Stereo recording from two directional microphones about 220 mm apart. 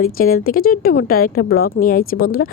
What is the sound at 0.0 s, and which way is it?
Speech, 40° left (ahead or behind).